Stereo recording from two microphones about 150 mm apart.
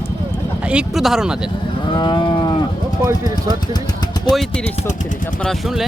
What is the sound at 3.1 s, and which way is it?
Speech, 20° right (ahead or behind).